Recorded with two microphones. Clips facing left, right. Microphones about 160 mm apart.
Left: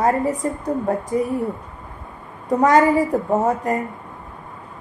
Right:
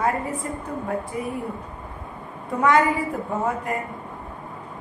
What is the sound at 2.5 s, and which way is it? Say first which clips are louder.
A woman's voice: left 5 dB; 40° left (ahead or behind).